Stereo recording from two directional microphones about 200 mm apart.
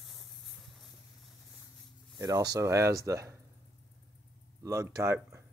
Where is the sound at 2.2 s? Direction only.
20° right (ahead or behind).